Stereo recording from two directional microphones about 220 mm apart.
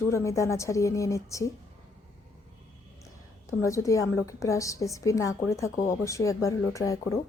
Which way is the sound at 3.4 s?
15° left (ahead or behind).